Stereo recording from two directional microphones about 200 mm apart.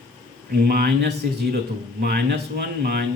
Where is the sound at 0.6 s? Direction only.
50° right (ahead or behind).